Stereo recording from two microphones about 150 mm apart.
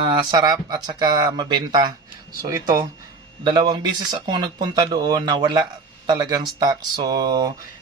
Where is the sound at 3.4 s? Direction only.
30° right (ahead or behind).